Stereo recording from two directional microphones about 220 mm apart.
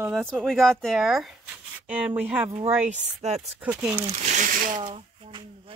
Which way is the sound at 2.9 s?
30° right (ahead or behind).